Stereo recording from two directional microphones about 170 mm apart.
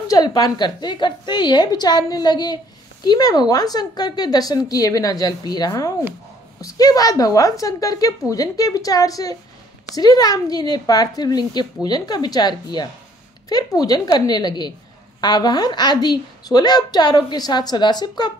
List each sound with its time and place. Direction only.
0.1 s a woman's voice: 20° left (ahead or behind)